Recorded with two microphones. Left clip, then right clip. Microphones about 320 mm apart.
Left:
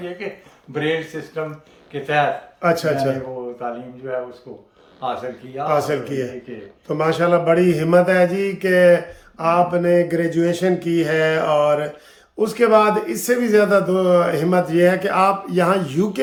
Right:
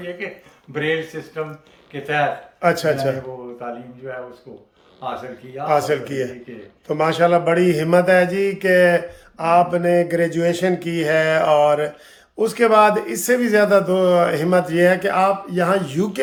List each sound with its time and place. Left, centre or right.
0.7 s a man's voice: centre